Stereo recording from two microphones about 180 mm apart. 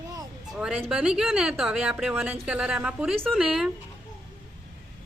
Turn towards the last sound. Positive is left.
turn(degrees=-5)  # may be behind; listen again after turning